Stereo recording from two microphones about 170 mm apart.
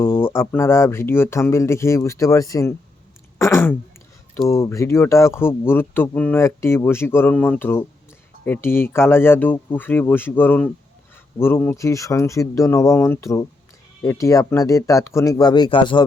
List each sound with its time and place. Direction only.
0.0 s speech: 15° left (ahead or behind)
3.3 s a sound: 15° left (ahead or behind)
4.4 s speech: 20° left (ahead or behind)